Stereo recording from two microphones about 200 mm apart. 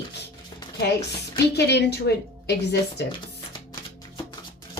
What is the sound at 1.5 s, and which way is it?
A woman's voice, 55° left (ahead or behind).